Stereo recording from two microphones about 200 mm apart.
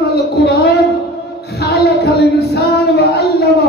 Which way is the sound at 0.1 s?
50° left (ahead or behind).